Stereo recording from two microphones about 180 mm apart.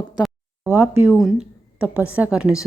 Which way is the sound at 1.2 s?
Centre (ahead or behind).